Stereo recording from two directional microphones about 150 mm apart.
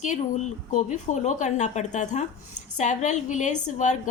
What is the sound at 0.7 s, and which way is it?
A woman's voice, 50° left (ahead or behind).